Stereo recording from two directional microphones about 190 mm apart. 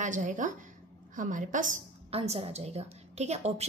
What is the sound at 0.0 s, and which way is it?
A woman's voice, 40° right (ahead or behind).